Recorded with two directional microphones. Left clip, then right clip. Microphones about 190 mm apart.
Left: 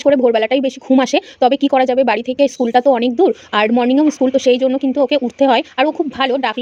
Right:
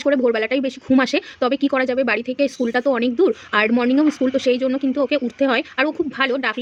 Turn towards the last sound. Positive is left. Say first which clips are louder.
# left 4 dB
turn(degrees=15)  # may be behind; listen again after turning